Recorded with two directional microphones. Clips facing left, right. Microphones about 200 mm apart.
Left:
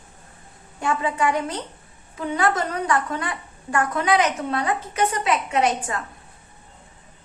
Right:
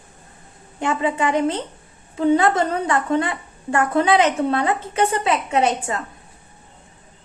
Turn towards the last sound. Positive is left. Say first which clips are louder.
# right 2 dB
turn(degrees=-25)  # may be behind; listen again after turning